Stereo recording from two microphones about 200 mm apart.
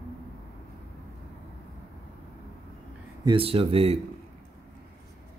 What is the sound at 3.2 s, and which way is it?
Speech, 25° right (ahead or behind).